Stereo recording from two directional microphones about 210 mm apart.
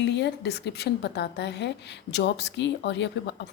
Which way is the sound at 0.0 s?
55° left (ahead or behind).